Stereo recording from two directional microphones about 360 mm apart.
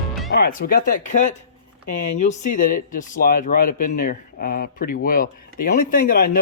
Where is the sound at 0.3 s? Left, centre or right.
Left.